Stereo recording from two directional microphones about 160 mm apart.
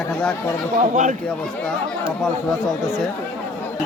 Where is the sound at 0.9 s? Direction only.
50° right (ahead or behind).